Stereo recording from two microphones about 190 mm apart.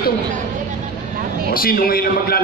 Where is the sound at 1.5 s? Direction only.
50° left (ahead or behind).